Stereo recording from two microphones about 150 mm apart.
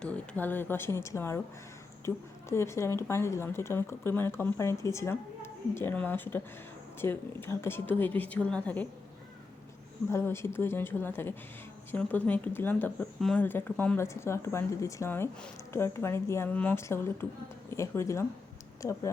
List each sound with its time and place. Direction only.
0.0 s speech: 10° left (ahead or behind)
10.1 s speech: 15° left (ahead or behind)